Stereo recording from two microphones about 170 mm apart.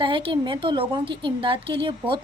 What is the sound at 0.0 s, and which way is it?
A woman's voice, 30° right (ahead or behind).